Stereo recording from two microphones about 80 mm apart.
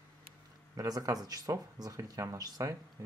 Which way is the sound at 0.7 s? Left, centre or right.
Right.